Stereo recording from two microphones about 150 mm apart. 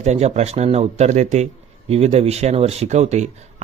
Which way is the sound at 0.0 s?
45° right (ahead or behind).